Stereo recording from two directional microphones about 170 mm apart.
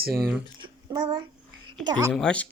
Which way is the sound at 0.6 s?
25° right (ahead or behind).